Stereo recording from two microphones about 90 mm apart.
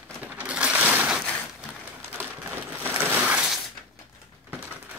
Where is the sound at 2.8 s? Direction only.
20° right (ahead or behind).